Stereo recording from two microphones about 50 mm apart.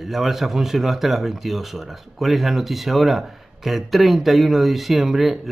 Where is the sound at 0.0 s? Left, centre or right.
Centre.